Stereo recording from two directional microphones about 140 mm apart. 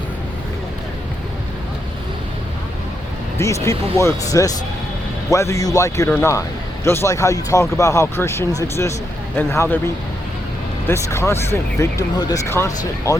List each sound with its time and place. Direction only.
3.3 s speech: 20° left (ahead or behind)
6.1 s speech: 10° left (ahead or behind)